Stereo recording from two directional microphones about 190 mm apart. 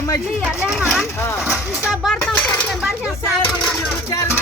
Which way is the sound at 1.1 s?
15° left (ahead or behind).